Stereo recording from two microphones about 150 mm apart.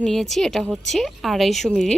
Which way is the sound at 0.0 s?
Centre (ahead or behind).